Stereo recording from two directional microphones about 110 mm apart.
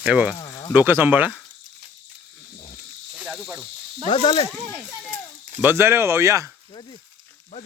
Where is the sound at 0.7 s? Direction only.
20° right (ahead or behind).